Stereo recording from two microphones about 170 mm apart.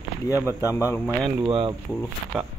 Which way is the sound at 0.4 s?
15° right (ahead or behind).